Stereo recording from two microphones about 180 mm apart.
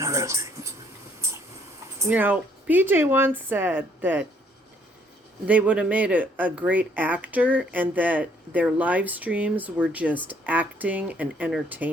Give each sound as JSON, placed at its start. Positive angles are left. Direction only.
{"t": 0.0, "sound": "a sound", "side_deg": -15}
{"t": 2.0, "sound": "speech", "side_deg": -10}
{"t": 5.5, "sound": "speech", "side_deg": -5}